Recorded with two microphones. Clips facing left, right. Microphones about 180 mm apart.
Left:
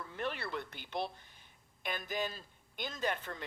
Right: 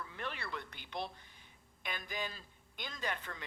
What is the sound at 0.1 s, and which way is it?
Speech, 45° left (ahead or behind).